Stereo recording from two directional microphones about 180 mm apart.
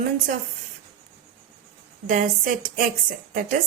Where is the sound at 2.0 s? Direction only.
50° right (ahead or behind).